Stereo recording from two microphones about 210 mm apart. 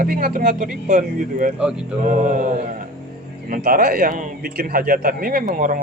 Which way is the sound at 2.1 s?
40° right (ahead or behind).